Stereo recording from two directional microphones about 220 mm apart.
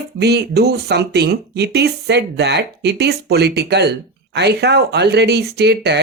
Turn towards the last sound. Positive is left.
turn(degrees=-50)  # may be behind; listen again after turning